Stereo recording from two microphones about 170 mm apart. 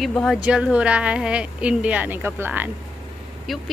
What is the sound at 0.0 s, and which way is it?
Speech, centre (ahead or behind).